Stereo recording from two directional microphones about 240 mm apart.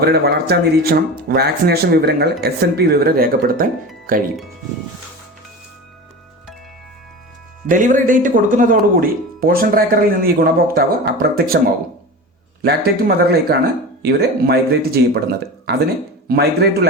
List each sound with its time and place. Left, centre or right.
0.0 s speech: right
7.7 s speech: right
12.6 s speech: right